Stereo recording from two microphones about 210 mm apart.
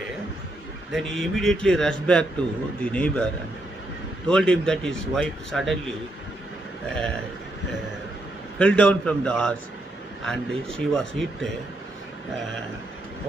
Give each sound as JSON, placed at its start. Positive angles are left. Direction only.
{"t": 0.9, "sound": "a man's voice", "side_deg": 0}
{"t": 4.3, "sound": "speech", "side_deg": 5}
{"t": 8.5, "sound": "speech", "side_deg": 5}